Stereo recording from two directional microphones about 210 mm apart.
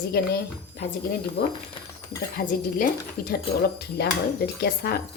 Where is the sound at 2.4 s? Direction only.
50° left (ahead or behind).